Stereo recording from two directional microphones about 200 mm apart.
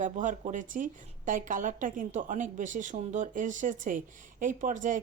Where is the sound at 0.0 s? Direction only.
40° right (ahead or behind).